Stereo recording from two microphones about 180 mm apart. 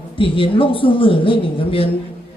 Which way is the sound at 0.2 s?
30° left (ahead or behind).